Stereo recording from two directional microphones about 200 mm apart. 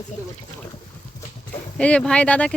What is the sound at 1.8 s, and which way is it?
Speech, 5° left (ahead or behind).